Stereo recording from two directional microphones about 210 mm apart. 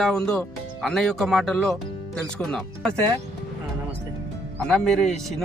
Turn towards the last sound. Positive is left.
turn(degrees=5)  # may be behind; listen again after turning